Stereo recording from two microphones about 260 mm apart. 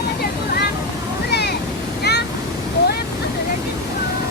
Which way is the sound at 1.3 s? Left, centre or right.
Left.